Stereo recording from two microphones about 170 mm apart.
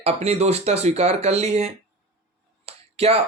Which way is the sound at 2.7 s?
35° right (ahead or behind).